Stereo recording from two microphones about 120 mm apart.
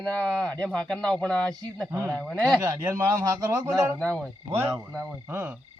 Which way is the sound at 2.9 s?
25° right (ahead or behind).